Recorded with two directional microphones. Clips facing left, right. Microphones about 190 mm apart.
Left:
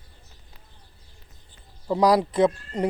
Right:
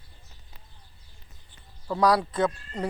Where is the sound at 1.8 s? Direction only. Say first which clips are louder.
Left 3 dB; 20° left (ahead or behind).